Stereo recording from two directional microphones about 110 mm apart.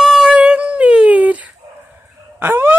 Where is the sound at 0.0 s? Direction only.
5° right (ahead or behind).